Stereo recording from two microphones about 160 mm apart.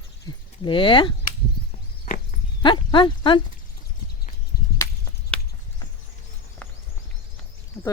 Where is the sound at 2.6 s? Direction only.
30° left (ahead or behind).